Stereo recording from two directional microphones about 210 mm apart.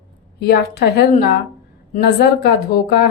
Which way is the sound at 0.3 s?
50° left (ahead or behind).